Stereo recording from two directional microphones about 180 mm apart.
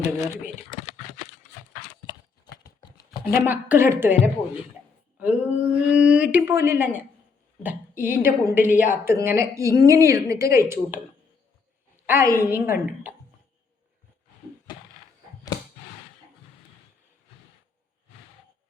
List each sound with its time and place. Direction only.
0.2 s crumpling: 40° left (ahead or behind)
3.4 s speech: 10° right (ahead or behind)
5.2 s speech: 10° right (ahead or behind)
12.0 s speech: 15° right (ahead or behind)